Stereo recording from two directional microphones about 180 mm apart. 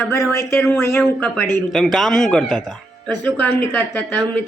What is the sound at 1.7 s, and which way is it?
Speech, centre (ahead or behind).